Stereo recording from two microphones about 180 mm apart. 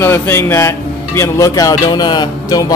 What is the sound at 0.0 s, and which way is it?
Speech, 15° left (ahead or behind).